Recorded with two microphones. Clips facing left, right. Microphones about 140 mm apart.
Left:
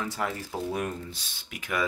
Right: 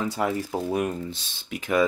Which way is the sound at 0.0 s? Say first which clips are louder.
Right 6 dB; 20° right (ahead or behind).